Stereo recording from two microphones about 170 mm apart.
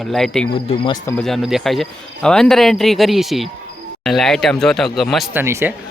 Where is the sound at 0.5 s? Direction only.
30° left (ahead or behind).